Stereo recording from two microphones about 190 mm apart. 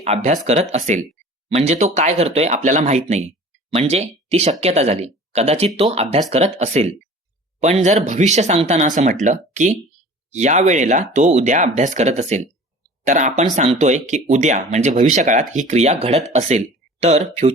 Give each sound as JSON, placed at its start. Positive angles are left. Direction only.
{"t": 0.0, "sound": "speech", "side_deg": -35}